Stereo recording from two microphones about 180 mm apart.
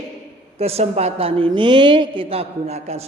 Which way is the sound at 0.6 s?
35° right (ahead or behind).